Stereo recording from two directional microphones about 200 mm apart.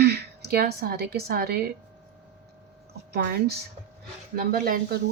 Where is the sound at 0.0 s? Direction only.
55° right (ahead or behind).